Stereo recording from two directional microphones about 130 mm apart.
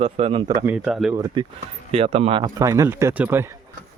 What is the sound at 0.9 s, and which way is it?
Speech, 5° right (ahead or behind).